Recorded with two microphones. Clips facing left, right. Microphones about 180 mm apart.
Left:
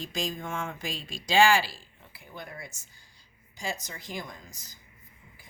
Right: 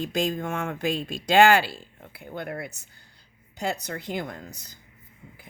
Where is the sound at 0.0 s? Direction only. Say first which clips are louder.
Right 7 dB; 60° right (ahead or behind).